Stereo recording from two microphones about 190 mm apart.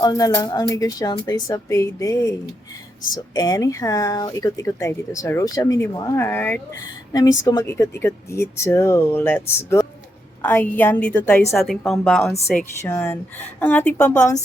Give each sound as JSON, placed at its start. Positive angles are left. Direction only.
{"t": 0.0, "sound": "speech", "side_deg": 20}
{"t": 3.3, "sound": "a woman's voice", "side_deg": 20}
{"t": 12.8, "sound": "speech", "side_deg": 15}